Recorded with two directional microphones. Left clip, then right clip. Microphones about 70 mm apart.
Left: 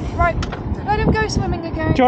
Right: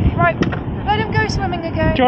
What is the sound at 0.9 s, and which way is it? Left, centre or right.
Speech, centre.